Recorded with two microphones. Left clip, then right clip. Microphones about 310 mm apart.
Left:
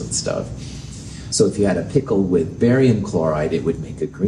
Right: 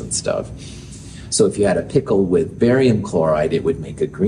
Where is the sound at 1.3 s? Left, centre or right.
Right.